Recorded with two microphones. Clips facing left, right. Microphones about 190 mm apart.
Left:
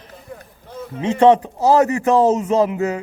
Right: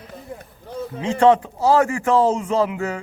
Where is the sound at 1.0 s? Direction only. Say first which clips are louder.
Left 2 dB; 25° left (ahead or behind).